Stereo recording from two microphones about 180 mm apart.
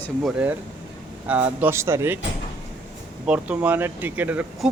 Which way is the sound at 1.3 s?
10° right (ahead or behind).